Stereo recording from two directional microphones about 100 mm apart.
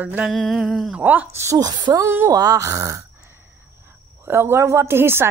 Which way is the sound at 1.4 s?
35° right (ahead or behind).